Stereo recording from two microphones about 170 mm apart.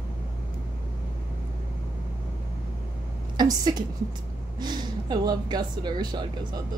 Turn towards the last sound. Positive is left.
turn(degrees=-25)  # may be behind; listen again after turning